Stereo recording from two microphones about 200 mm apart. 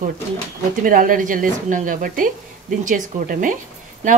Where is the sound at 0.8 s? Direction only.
45° right (ahead or behind).